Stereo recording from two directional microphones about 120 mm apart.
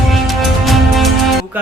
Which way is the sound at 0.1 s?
Centre (ahead or behind).